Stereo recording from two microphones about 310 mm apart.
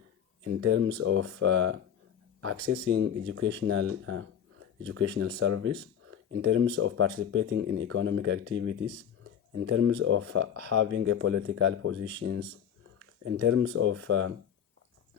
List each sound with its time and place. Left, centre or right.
0.4 s speech: right
2.9 s speech: right
13.4 s speech: right